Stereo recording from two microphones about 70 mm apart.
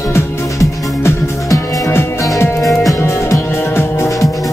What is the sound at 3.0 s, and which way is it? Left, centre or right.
Music, left.